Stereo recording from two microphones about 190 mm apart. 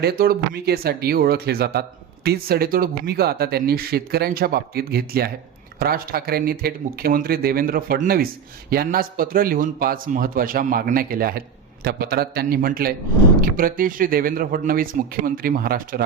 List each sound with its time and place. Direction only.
0.0 s speech: 55° right (ahead or behind)